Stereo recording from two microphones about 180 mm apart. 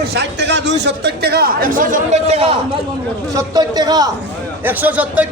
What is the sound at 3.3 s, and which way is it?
Speech, 20° right (ahead or behind).